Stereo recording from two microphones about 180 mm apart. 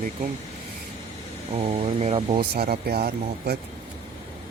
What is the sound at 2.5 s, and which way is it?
Speech, 60° right (ahead or behind).